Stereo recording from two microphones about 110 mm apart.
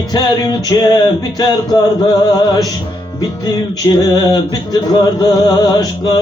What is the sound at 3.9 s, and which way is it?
Music, 40° left (ahead or behind).